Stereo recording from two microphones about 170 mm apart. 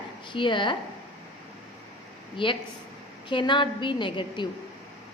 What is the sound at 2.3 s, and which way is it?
A woman's voice, 30° left (ahead or behind).